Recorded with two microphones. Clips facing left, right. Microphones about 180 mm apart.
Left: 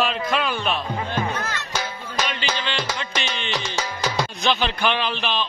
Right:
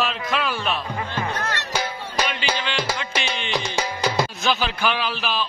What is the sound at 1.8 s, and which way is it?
Music, 10° right (ahead or behind).